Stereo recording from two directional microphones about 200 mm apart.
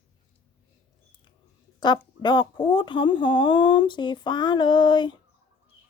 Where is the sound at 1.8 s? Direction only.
20° left (ahead or behind).